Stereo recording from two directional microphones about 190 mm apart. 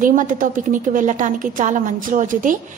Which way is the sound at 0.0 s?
45° right (ahead or behind).